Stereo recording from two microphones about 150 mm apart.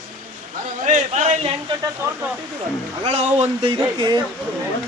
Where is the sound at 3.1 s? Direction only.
45° right (ahead or behind); by 4.2 s 30° right (ahead or behind).